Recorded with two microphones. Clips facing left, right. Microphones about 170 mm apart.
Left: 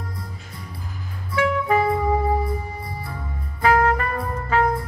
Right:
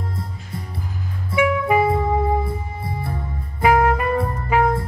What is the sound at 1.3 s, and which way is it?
Music, 10° right (ahead or behind).